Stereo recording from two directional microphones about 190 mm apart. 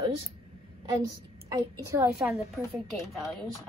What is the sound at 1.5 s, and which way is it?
Speech, 15° right (ahead or behind).